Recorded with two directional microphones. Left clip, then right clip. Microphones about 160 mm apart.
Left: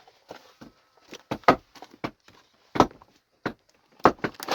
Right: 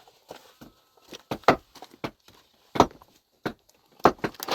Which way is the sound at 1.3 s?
35° right (ahead or behind).